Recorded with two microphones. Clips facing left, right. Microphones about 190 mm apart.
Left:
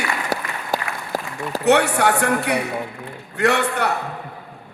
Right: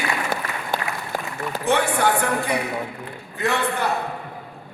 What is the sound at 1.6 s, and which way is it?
A man's voice, 70° left (ahead or behind).